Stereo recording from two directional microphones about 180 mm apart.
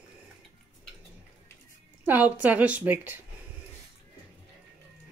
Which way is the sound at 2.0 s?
10° right (ahead or behind).